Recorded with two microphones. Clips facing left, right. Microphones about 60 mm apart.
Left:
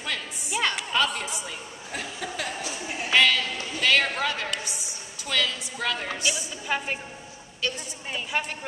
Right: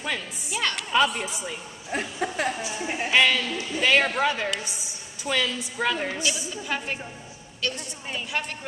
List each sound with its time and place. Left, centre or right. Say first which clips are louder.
0.5 s a woman's voice: left 1 dB; centre
0.9 s a woman's voice: right 3 dB; centre
1.9 s a sound: right 6 dB; right
2.8 s a woman's voice: right 4 dB; right
3.1 s a woman's voice: even; centre
6.2 s a woman's voice: even; centre